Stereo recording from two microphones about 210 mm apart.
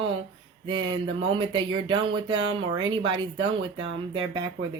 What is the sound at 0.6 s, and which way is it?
Mantra, 25° right (ahead or behind).